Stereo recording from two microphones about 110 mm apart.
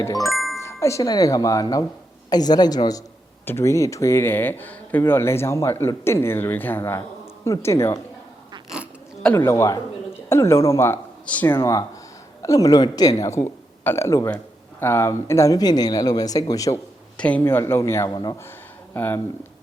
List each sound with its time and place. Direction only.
0.0 s speech: 30° left (ahead or behind)
0.3 s music: centre (ahead or behind)
0.6 s speech: 25° left (ahead or behind)
3.4 s speech: 25° left (ahead or behind)
9.3 s a man's voice: 25° left (ahead or behind)
17.2 s speech: 10° left (ahead or behind)
17.4 s speech: 20° left (ahead or behind)
18.1 s speech: 40° left (ahead or behind)
18.9 s speech: 20° left (ahead or behind)